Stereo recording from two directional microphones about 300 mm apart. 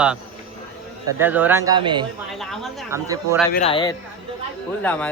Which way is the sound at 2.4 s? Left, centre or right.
Centre.